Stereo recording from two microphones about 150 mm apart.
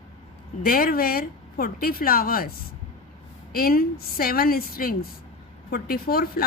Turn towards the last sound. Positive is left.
turn(degrees=90)